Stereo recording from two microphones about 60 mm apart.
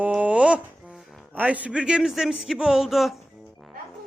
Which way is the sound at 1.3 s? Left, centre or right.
Right.